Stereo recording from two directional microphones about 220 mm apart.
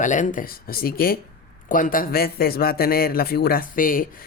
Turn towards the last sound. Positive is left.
turn(degrees=40)  # may be behind; listen again after turning